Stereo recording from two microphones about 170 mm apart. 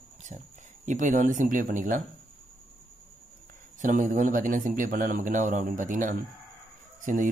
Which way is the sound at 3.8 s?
45° right (ahead or behind).